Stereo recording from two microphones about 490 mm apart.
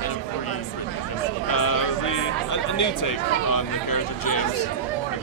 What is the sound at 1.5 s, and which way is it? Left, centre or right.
Speech, left.